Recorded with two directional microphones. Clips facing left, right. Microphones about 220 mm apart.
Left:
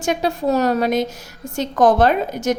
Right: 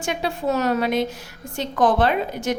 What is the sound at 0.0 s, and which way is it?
A woman's voice, 40° left (ahead or behind).